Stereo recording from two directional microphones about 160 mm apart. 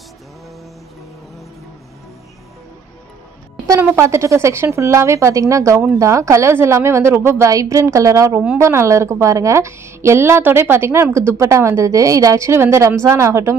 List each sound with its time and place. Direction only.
3.6 s a woman's voice: 20° right (ahead or behind)